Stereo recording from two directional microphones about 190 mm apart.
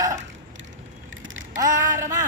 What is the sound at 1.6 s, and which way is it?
Mantra, 20° right (ahead or behind).